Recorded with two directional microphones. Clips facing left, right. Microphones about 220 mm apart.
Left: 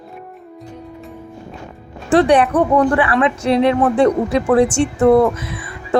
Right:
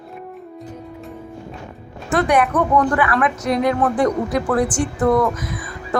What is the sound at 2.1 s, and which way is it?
Speech, 30° left (ahead or behind).